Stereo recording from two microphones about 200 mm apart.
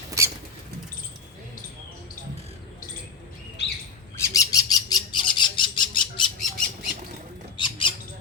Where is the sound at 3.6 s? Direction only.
60° left (ahead or behind).